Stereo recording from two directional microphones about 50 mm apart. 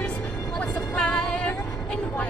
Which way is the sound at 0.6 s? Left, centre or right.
Centre.